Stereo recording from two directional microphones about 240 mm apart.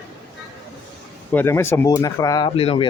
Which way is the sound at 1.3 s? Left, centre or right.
Centre.